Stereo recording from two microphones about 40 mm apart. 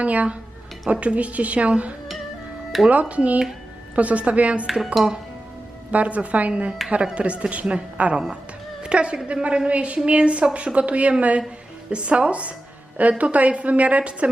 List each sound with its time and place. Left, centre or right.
0.0 s a woman's voice: right
4.6 s dishes: centre
5.9 s a woman's voice: right